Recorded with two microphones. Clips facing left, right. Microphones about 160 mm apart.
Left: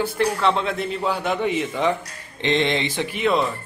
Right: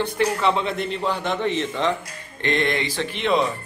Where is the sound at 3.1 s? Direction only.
Centre (ahead or behind).